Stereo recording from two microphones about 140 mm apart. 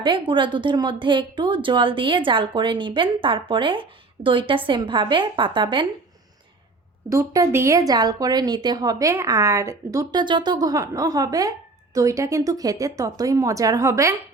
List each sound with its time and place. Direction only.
0.0 s a woman's voice: 35° right (ahead or behind)
7.1 s speech: 25° right (ahead or behind)